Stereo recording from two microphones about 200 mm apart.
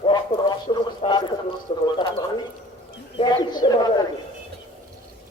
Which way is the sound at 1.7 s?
30° left (ahead or behind).